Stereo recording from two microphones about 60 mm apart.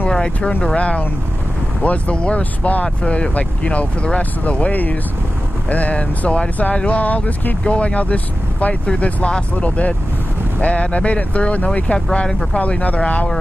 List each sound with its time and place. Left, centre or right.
0.1 s speech: centre
12.5 s speech: left